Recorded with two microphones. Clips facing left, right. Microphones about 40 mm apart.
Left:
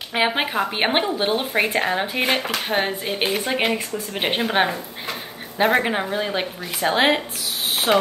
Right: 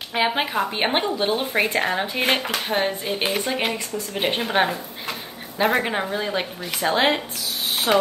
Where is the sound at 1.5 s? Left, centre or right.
Centre.